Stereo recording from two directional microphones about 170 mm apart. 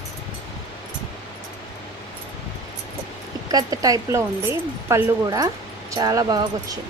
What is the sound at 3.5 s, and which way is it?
Speech, 20° right (ahead or behind).